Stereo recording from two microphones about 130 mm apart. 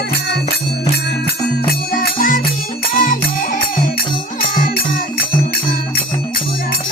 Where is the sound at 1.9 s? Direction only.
90° left.